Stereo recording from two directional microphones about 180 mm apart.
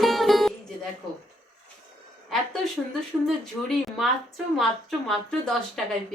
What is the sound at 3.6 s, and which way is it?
A woman's voice, centre (ahead or behind).